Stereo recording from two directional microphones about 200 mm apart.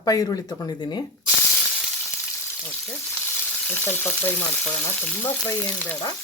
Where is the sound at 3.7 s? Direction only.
10° left (ahead or behind).